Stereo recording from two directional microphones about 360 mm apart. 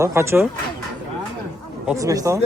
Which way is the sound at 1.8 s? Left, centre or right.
Centre.